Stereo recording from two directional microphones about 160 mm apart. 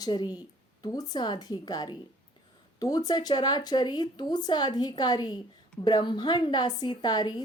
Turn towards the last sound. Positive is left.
turn(degrees=25)  # may be behind; listen again after turning